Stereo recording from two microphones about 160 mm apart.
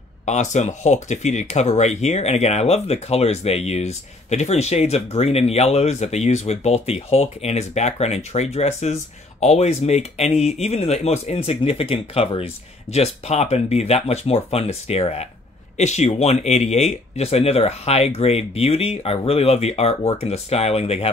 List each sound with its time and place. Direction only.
0.2 s speech: 45° left (ahead or behind)